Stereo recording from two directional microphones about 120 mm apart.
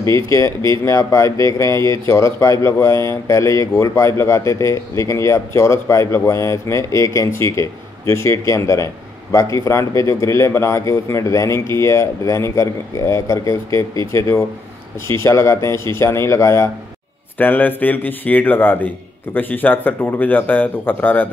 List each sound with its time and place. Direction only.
0.0 s a man's voice: 25° left (ahead or behind)